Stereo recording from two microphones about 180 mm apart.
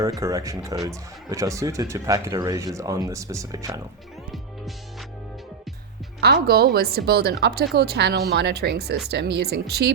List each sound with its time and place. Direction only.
0.0 s speech: 20° right (ahead or behind)
6.1 s a woman's voice: 65° right (ahead or behind)